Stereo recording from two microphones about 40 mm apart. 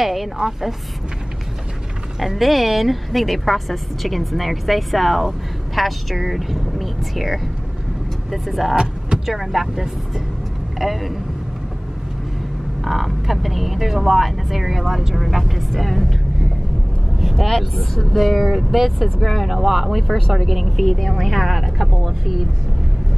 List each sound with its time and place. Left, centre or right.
0.0 s speech: centre
2.1 s speech: centre
12.8 s speech: centre
17.2 s speech: centre